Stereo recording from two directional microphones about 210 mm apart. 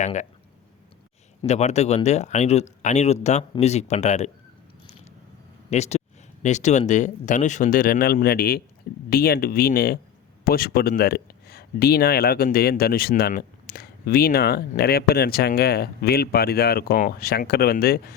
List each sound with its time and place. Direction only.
0.0 s speech: 35° left (ahead or behind)
1.5 s speech: 30° left (ahead or behind)
5.7 s speech: 30° left (ahead or behind)